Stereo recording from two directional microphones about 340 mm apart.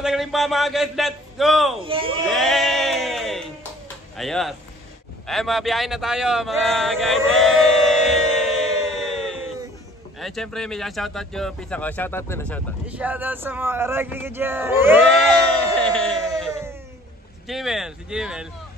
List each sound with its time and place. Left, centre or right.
0.0 s a man's voice: centre
1.9 s speech: centre
2.2 s music: centre
4.2 s speech: centre
5.2 s a sound: centre
10.1 s speech: centre
15.8 s a sound: centre
17.5 s speech: centre